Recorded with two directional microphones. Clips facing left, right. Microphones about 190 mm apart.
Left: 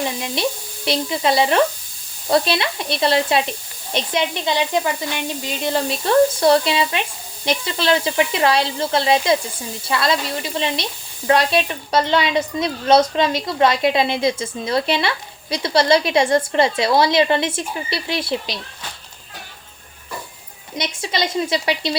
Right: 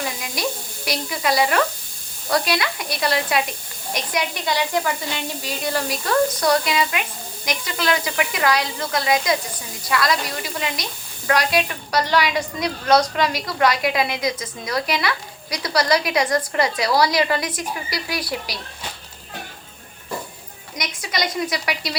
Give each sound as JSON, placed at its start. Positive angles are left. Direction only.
{"t": 0.0, "sound": "sizzle", "side_deg": 25}
{"t": 0.9, "sound": "a woman's voice", "side_deg": 25}
{"t": 20.7, "sound": "a woman's voice", "side_deg": 25}